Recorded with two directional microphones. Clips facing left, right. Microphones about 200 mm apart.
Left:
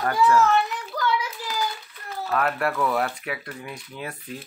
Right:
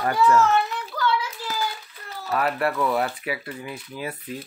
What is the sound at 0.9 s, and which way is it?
Hands, 40° left (ahead or behind).